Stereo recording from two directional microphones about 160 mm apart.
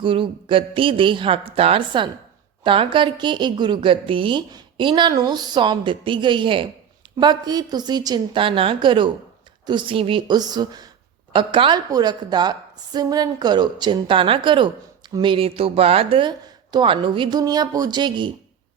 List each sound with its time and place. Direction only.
0.0 s a woman's voice: 30° right (ahead or behind)